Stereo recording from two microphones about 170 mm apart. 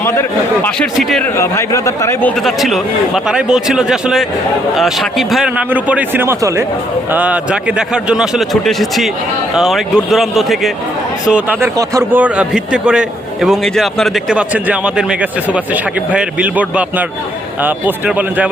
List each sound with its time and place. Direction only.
0.0 s a man's voice: 15° left (ahead or behind)
0.9 s a man's voice: centre (ahead or behind)
1.4 s a man's voice: 15° left (ahead or behind)
2.4 s a man's voice: centre (ahead or behind)
11.8 s speech: 20° right (ahead or behind)
12.2 s a man's voice: 5° right (ahead or behind)